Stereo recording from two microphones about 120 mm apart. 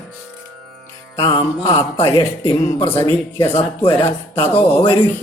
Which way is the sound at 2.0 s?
50° left (ahead or behind).